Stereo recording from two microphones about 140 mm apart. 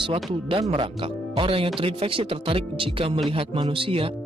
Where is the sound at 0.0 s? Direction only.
40° right (ahead or behind).